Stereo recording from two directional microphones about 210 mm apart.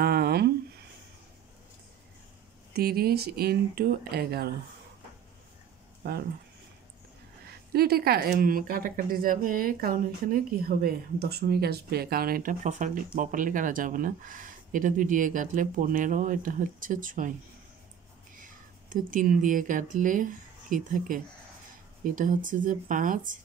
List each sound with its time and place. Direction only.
0.0 s a sound: 45° right (ahead or behind)
2.7 s speech: 45° right (ahead or behind)
6.0 s speech: 50° right (ahead or behind)
7.7 s speech: 50° right (ahead or behind)
18.4 s speech: 40° right (ahead or behind)